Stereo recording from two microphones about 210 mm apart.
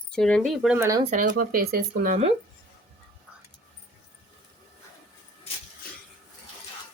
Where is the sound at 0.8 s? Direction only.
15° right (ahead or behind).